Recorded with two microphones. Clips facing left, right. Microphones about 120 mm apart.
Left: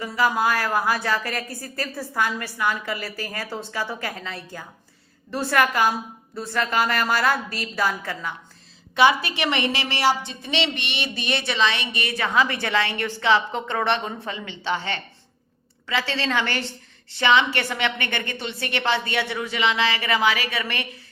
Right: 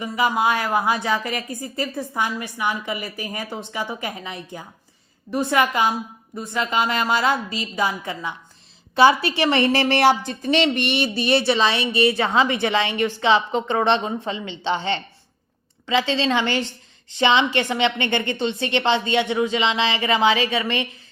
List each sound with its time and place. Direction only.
0.3 s a woman's voice: 20° right (ahead or behind)
9.0 s a woman's voice: 30° right (ahead or behind)
9.7 s speech: 50° right (ahead or behind); by 20.8 s 20° right (ahead or behind)